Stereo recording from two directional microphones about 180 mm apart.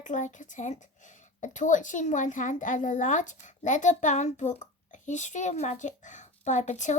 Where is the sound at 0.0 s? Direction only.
45° left (ahead or behind).